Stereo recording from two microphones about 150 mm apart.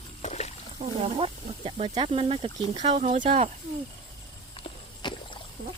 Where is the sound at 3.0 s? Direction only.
55° right (ahead or behind).